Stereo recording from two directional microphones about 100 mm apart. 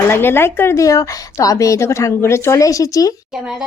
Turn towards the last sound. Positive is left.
turn(degrees=35)  # may be behind; listen again after turning